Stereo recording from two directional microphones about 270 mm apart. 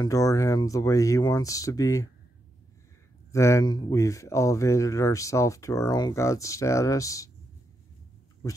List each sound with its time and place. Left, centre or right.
0.0 s speech: centre
3.3 s speech: centre